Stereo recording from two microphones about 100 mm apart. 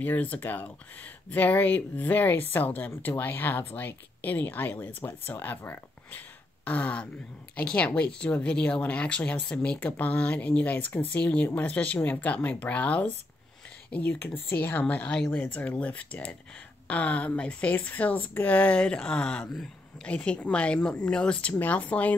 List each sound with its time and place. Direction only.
0.0 s speech: 15° left (ahead or behind)